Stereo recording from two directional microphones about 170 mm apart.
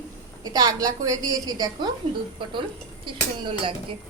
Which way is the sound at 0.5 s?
20° right (ahead or behind).